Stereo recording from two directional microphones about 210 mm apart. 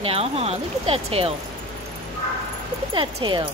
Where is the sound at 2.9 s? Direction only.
25° right (ahead or behind).